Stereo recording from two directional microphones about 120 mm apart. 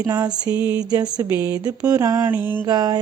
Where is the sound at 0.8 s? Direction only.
35° right (ahead or behind).